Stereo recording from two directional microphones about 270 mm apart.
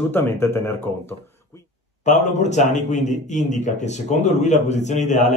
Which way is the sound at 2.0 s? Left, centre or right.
Left.